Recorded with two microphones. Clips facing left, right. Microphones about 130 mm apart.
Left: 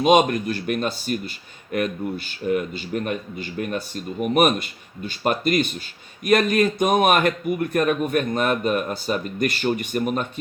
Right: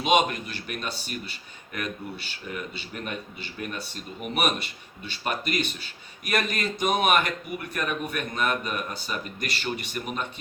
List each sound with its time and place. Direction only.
0.0 s speech: 45° left (ahead or behind)